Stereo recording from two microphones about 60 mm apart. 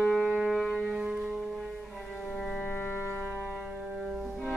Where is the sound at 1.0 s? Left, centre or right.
Centre.